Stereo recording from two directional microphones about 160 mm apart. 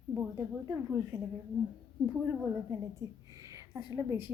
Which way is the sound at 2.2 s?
20° right (ahead or behind).